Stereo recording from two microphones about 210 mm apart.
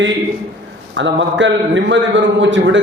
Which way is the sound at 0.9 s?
60° right (ahead or behind).